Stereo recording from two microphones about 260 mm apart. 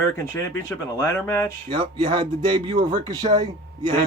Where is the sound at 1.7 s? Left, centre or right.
Centre.